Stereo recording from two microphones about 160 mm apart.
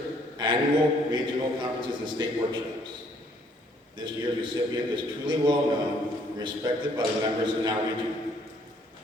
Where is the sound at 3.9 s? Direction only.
30° right (ahead or behind).